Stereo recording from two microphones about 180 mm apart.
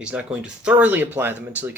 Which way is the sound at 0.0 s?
5° right (ahead or behind).